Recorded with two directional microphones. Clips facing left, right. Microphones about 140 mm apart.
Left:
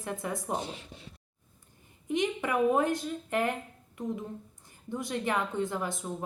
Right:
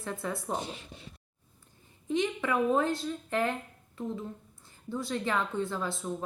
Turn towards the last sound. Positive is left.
turn(degrees=20)  # may be behind; listen again after turning